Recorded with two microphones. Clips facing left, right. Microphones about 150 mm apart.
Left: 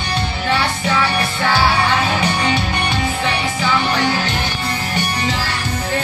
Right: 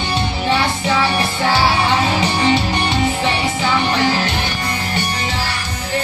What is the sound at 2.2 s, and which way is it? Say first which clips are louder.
Music: right 2 dB; 25° right (ahead or behind).